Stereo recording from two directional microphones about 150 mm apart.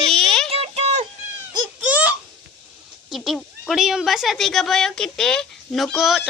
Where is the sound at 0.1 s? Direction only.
5° left (ahead or behind).